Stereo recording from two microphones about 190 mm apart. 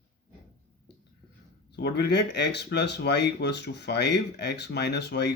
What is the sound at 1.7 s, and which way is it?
Speech, 60° left (ahead or behind).